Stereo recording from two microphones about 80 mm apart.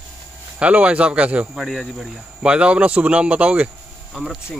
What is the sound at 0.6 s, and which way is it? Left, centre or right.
Speech, centre.